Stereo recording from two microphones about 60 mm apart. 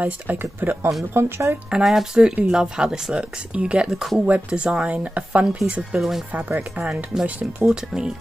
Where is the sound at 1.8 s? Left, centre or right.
Centre.